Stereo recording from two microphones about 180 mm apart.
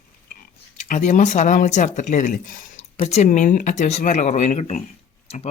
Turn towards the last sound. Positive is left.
turn(degrees=40)  # may be behind; listen again after turning